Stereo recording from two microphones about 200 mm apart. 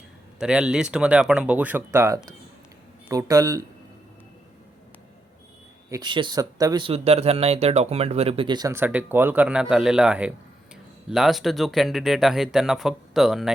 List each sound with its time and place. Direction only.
0.3 s speech: 5° right (ahead or behind)
5.9 s speech: 20° right (ahead or behind); by 13.5 s centre (ahead or behind)